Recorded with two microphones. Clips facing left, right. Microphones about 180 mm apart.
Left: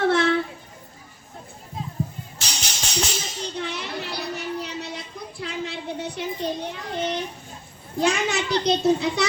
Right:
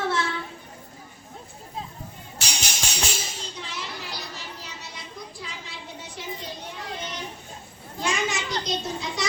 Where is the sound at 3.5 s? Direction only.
60° left (ahead or behind).